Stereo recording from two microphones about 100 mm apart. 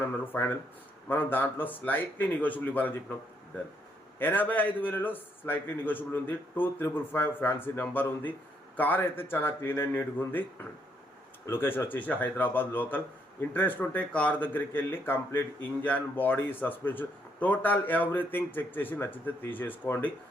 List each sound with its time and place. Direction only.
0.0 s speech: 25° left (ahead or behind)
4.2 s speech: 20° left (ahead or behind)